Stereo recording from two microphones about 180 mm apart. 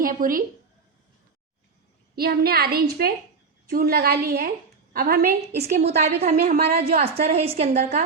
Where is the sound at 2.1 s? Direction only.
60° right (ahead or behind).